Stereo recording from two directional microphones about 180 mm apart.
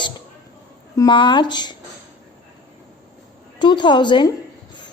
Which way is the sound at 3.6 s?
25° left (ahead or behind).